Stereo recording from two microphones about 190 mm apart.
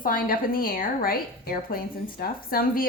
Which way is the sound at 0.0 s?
45° left (ahead or behind).